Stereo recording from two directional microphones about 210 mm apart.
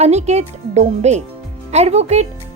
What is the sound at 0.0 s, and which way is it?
A woman's voice, 30° right (ahead or behind).